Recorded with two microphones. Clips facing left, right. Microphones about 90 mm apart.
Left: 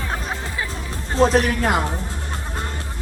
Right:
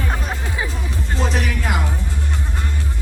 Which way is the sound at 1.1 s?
40° left (ahead or behind).